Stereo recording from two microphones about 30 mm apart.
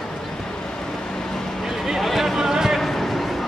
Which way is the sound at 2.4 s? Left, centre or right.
Centre.